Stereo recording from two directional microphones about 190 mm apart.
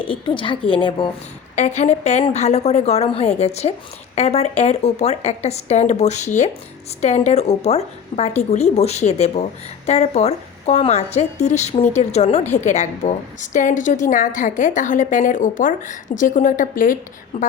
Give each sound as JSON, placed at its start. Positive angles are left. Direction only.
{"t": 0.1, "sound": "a woman's voice", "side_deg": 25}
{"t": 1.5, "sound": "a woman's voice", "side_deg": 40}